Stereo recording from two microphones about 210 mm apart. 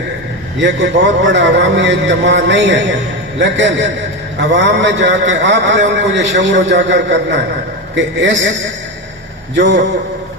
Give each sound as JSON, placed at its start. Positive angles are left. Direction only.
{"t": 0.6, "sound": "a man's voice", "side_deg": -55}
{"t": 9.6, "sound": "a man's voice", "side_deg": -60}